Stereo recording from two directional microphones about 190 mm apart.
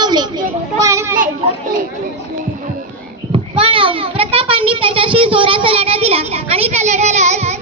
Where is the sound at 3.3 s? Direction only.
30° right (ahead or behind).